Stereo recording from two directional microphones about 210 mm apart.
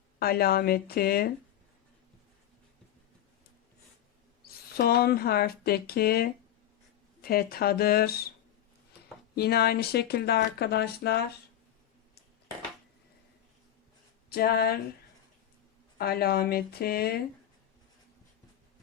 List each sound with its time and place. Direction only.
0.2 s speech: 45° left (ahead or behind)
4.4 s speech: 50° left (ahead or behind)
9.3 s speech: 50° left (ahead or behind)
14.3 s speech: 45° left (ahead or behind)
16.0 s speech: 45° left (ahead or behind)